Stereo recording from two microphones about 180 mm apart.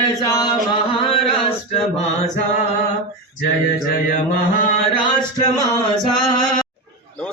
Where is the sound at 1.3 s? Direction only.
35° left (ahead or behind).